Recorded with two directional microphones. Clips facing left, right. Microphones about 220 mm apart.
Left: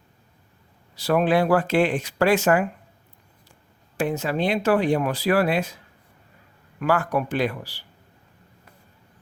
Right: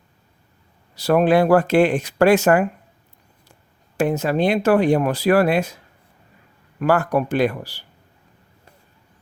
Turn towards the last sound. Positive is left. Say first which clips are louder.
# right 5 dB
turn(degrees=-45)  # may be behind; listen again after turning